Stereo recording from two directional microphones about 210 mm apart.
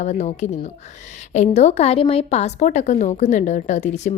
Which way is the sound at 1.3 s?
30° left (ahead or behind).